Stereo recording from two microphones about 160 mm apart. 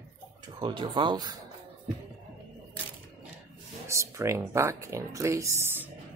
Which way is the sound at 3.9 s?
20° right (ahead or behind).